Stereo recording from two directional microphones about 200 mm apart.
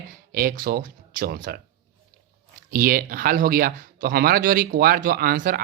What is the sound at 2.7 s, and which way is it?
Speech, 45° right (ahead or behind).